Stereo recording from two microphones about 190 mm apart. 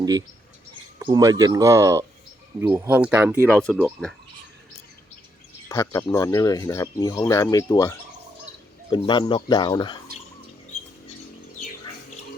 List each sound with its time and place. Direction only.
0.0 s speech: 20° right (ahead or behind)
5.6 s speech: 15° left (ahead or behind)